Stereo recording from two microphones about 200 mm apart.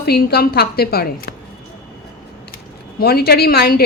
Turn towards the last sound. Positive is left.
turn(degrees=50)  # may be behind; listen again after turning